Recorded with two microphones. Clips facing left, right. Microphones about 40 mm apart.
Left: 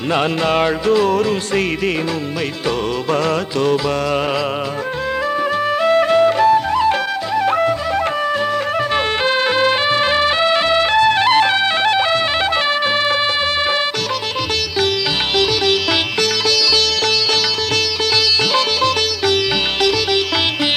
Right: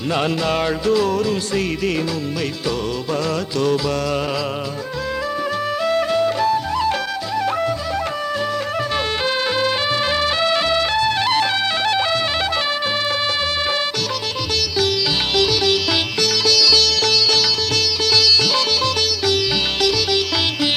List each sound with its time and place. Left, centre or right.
0.1 s music: left
3.6 s music: left
5.8 s music: left
9.2 s music: left
15.4 s music: left
18.1 s music: left